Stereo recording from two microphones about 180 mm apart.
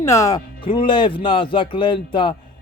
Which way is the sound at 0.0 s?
15° left (ahead or behind).